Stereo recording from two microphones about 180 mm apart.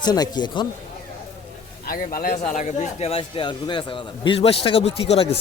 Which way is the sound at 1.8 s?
55° left (ahead or behind).